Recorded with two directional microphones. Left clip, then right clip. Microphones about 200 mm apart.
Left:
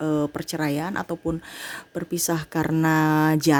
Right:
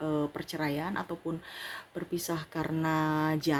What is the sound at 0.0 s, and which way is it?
Speech, 55° left (ahead or behind).